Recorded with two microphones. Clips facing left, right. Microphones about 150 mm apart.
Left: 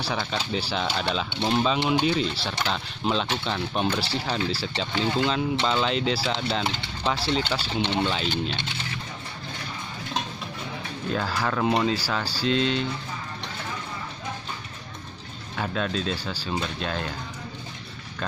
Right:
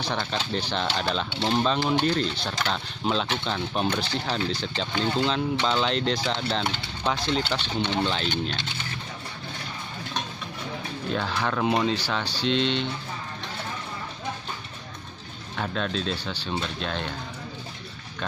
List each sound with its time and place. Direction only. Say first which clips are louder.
0.0 s speech: even; centre (ahead or behind)
11.1 s speech: left 1 dB; centre (ahead or behind)
15.5 s speech: left 1 dB; 5° left (ahead or behind)